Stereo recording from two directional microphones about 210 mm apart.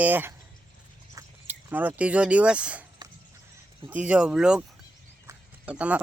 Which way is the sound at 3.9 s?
5° right (ahead or behind).